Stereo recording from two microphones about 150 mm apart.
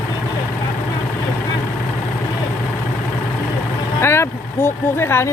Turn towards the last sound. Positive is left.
turn(degrees=15)  # may be behind; listen again after turning